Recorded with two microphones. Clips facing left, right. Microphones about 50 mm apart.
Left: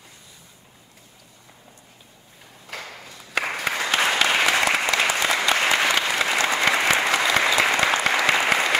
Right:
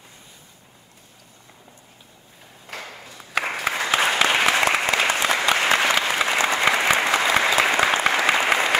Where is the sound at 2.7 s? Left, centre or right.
Centre.